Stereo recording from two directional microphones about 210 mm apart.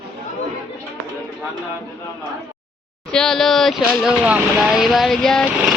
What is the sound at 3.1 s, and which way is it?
Speech, centre (ahead or behind).